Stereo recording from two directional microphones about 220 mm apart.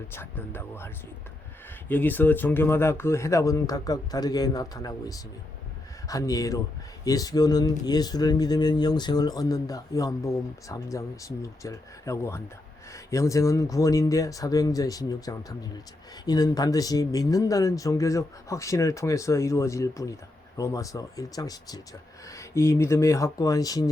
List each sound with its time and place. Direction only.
0.1 s speech: 10° left (ahead or behind)
1.9 s speech: 10° left (ahead or behind)